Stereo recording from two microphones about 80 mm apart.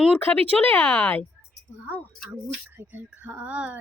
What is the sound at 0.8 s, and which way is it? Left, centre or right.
Speech, centre.